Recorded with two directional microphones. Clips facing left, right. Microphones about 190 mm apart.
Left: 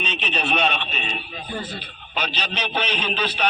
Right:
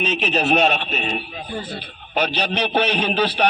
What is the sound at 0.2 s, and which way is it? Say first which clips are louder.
A man's voice: right 5 dB; 45° right (ahead or behind).